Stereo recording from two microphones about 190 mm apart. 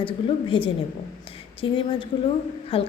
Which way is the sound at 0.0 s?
25° left (ahead or behind).